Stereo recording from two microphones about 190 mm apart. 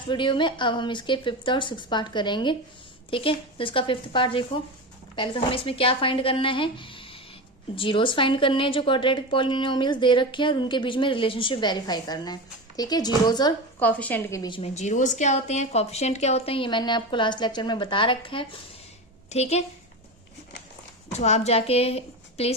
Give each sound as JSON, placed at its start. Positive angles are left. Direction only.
{"t": 0.1, "sound": "a woman's voice", "side_deg": 25}
{"t": 13.7, "sound": "a woman's voice", "side_deg": 10}
{"t": 14.6, "sound": "a woman's voice", "side_deg": 35}
{"t": 21.1, "sound": "a woman's voice", "side_deg": 35}